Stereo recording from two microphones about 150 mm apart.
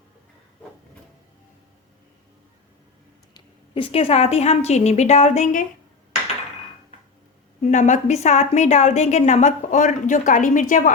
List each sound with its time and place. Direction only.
3.3 s a woman's voice: 35° left (ahead or behind); by 5.6 s 55° left (ahead or behind)
7.6 s a woman's voice: 55° left (ahead or behind)